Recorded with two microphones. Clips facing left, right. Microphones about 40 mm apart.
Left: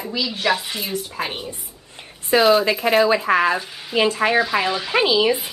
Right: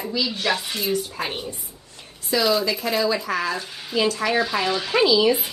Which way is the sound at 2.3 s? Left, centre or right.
Left.